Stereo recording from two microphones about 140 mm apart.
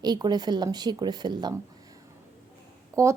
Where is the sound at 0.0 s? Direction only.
30° right (ahead or behind).